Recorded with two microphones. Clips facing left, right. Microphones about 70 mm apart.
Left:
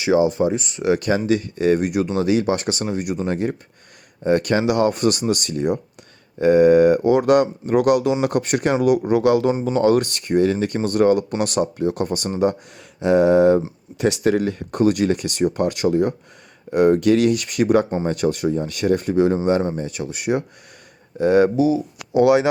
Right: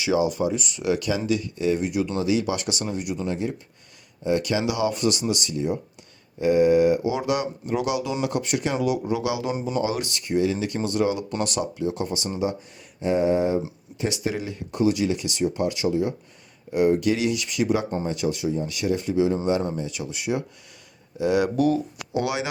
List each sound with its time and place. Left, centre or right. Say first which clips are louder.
0.0 s speech: left 5 dB; left
13.0 s speech: left 7 dB; left